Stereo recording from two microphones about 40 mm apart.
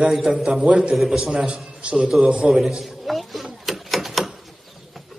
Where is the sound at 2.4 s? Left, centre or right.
Centre.